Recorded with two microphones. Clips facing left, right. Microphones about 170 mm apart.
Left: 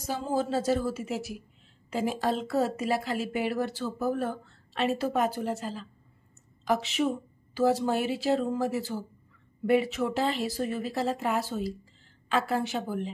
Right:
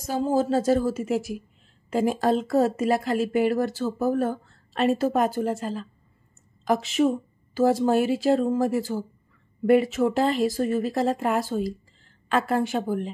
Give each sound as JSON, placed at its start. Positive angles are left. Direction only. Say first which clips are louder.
{"t": 0.1, "sound": "a woman's voice", "louder": "right 6 dB", "side_deg": -40}